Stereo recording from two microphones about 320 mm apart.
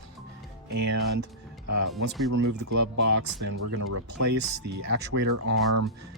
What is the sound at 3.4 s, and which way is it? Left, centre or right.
Speech, right.